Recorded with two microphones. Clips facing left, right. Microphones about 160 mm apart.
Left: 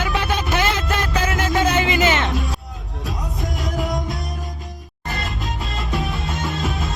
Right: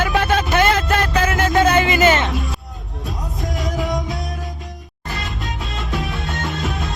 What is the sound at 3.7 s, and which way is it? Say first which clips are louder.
Music: even; centre (ahead or behind).